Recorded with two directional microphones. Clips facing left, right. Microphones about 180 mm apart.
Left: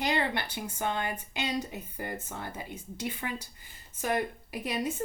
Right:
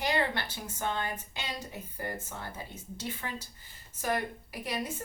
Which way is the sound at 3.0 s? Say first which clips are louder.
Left 3 dB; 15° left (ahead or behind).